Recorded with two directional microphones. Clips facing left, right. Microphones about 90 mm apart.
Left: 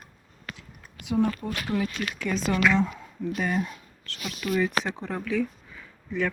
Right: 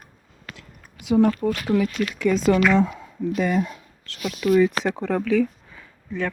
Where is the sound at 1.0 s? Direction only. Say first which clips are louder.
Right 7 dB; 90° right.